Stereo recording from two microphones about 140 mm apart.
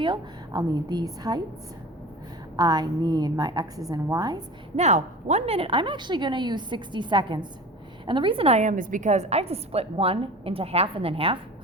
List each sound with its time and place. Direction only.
0.0 s a woman's voice: 35° right (ahead or behind)
2.6 s a woman's voice: 30° right (ahead or behind)
4.8 s a woman's voice: 55° right (ahead or behind)
8.6 s a woman's voice: 70° right (ahead or behind); by 11.3 s 40° right (ahead or behind)